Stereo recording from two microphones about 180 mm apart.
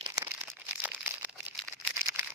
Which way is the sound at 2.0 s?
15° right (ahead or behind).